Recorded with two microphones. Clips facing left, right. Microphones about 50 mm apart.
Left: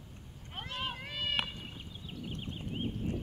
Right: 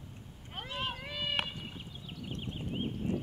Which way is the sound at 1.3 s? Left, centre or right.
Centre.